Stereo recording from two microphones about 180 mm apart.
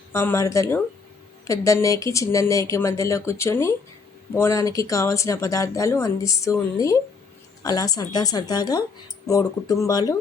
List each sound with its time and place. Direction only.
0.1 s a woman's voice: 15° left (ahead or behind)